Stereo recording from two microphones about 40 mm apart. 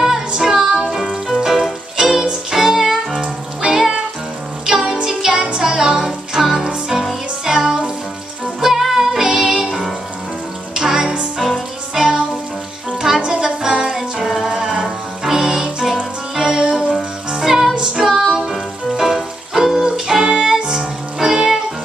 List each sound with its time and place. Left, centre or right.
0.3 s music: centre
11.3 s music: centre
18.1 s music: centre